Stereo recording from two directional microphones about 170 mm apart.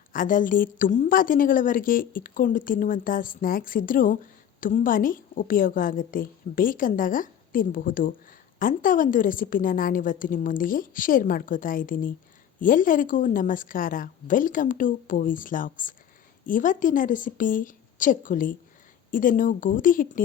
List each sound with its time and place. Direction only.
0.1 s a woman's voice: 55° left (ahead or behind)